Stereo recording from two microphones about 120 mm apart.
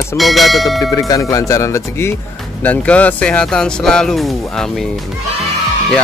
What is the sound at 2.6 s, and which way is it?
Speech, 10° left (ahead or behind).